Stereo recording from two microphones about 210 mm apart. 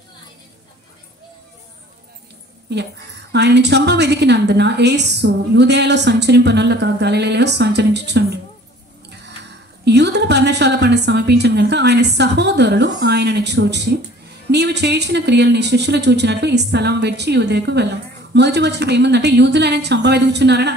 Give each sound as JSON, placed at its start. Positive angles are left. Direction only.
{"t": 2.7, "sound": "speech", "side_deg": -55}
{"t": 9.8, "sound": "a woman's voice", "side_deg": -55}